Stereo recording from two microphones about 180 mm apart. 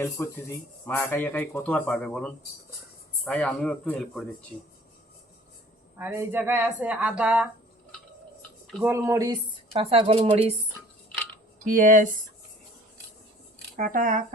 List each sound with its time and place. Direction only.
0.0 s speech: 15° left (ahead or behind)
6.0 s speech: 10° right (ahead or behind)
8.8 s speech: 15° right (ahead or behind)
9.7 s speech: 35° right (ahead or behind)
11.6 s speech: 45° right (ahead or behind)
13.7 s speech: 50° right (ahead or behind)